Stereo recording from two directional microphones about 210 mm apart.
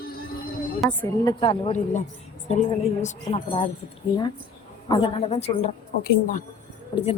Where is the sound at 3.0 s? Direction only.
30° left (ahead or behind).